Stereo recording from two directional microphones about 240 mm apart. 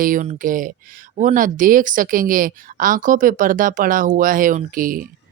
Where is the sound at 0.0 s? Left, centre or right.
Right.